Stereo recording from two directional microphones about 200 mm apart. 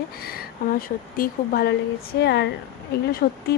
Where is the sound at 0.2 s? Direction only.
50° left (ahead or behind).